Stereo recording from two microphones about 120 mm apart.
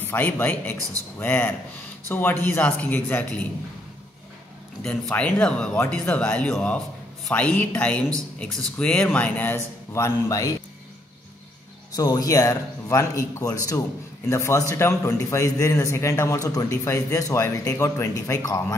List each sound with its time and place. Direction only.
0.1 s speech: 15° left (ahead or behind)
4.8 s speech: 10° left (ahead or behind); by 10.5 s 25° left (ahead or behind)
11.9 s a man's voice: 30° left (ahead or behind)